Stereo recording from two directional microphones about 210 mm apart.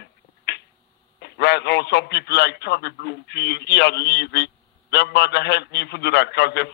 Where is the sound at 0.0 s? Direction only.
50° left (ahead or behind).